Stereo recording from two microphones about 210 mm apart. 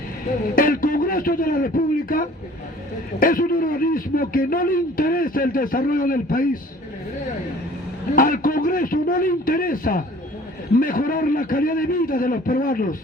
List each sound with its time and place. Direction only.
0.5 s a man's voice: 40° left (ahead or behind)
8.1 s speech: 40° left (ahead or behind)